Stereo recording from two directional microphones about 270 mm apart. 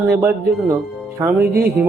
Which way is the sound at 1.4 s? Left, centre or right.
Right.